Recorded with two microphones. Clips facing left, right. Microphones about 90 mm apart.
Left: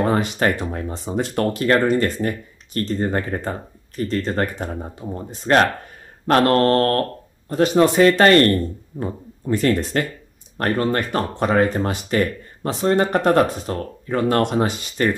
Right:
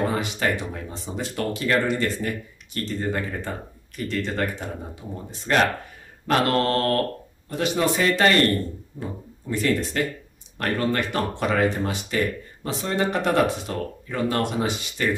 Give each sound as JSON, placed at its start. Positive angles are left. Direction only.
{"t": 0.0, "sound": "speech", "side_deg": 50}